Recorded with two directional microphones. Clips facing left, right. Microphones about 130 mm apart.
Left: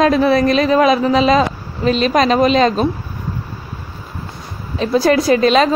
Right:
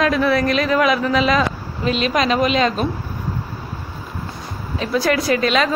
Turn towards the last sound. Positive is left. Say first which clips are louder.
# left 6 dB
turn(degrees=35)  # may be behind; listen again after turning